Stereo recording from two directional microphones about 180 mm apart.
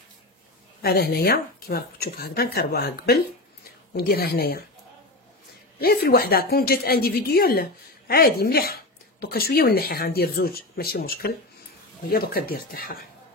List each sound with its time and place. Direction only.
0.8 s a woman's voice: 60° left (ahead or behind)
5.8 s a woman's voice: 55° left (ahead or behind)